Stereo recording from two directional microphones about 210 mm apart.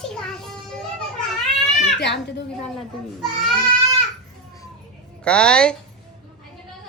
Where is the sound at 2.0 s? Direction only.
55° left (ahead or behind).